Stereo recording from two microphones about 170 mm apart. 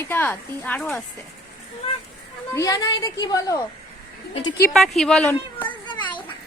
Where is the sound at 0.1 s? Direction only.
10° left (ahead or behind).